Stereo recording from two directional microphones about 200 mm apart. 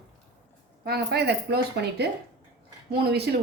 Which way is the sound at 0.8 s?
55° right (ahead or behind).